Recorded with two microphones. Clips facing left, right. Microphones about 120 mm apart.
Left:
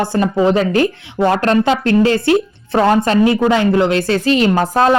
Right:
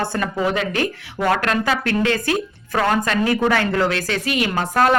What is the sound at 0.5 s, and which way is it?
A woman's voice, 35° left (ahead or behind).